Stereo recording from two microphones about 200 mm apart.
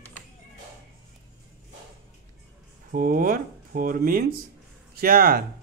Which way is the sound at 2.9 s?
45° right (ahead or behind).